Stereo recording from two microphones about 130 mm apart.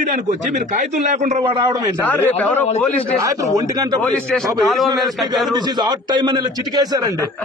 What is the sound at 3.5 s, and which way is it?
Speech, 30° right (ahead or behind).